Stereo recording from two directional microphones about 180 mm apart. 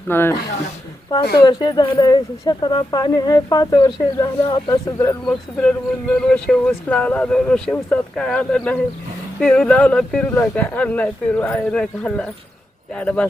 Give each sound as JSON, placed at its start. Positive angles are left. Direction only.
{"t": 0.1, "sound": "speech", "side_deg": 10}
{"t": 1.5, "sound": "speech", "side_deg": 25}
{"t": 5.2, "sound": "speech", "side_deg": 5}